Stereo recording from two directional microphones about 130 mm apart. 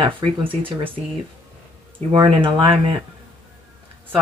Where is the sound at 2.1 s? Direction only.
35° right (ahead or behind).